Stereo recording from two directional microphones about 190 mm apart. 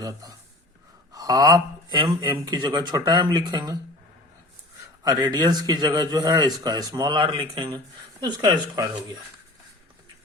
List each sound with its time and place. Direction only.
0.0 s a man's voice: 20° right (ahead or behind)
5.0 s a man's voice: 20° right (ahead or behind)